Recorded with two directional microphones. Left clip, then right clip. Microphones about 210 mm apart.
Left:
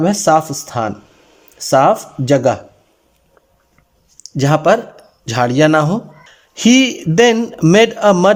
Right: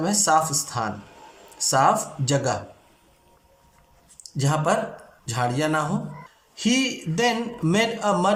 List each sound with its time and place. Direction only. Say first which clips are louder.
0.0 s speech: left 8 dB; 40° left (ahead or behind)
4.4 s speech: left 10 dB; 45° left (ahead or behind)